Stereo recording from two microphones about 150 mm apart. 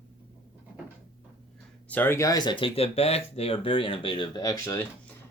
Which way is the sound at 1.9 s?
15° left (ahead or behind).